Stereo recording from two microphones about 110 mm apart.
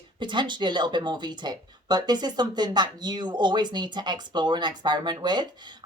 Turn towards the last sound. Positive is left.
turn(degrees=-40)  # may be behind; listen again after turning